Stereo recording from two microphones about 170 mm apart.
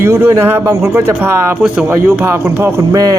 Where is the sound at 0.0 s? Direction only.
15° right (ahead or behind).